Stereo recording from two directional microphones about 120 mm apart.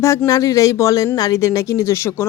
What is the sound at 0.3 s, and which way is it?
A woman's voice, 30° left (ahead or behind).